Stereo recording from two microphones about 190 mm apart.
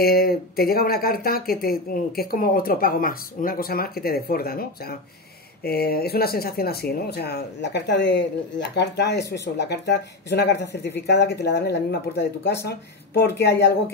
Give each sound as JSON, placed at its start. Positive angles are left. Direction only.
{"t": 0.0, "sound": "speech", "side_deg": 50}